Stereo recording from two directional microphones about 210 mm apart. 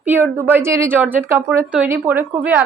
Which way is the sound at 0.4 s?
10° right (ahead or behind).